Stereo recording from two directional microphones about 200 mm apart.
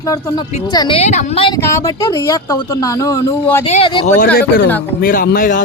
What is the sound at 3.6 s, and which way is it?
Speech, 30° left (ahead or behind).